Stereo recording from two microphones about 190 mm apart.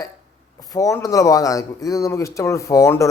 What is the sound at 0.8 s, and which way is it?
Speech, 15° left (ahead or behind).